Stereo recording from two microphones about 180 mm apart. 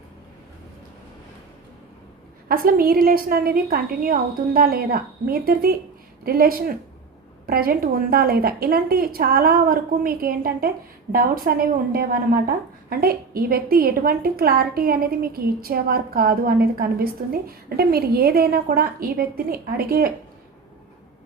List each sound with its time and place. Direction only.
2.5 s a woman's voice: 50° right (ahead or behind)